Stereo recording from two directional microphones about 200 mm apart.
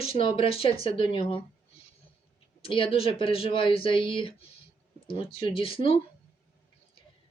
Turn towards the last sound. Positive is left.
turn(degrees=30)  # may be behind; listen again after turning